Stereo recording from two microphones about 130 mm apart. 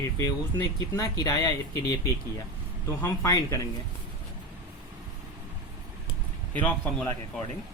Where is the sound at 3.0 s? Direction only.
25° left (ahead or behind).